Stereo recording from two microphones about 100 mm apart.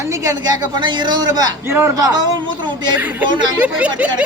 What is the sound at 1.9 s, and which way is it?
Speech, 40° right (ahead or behind).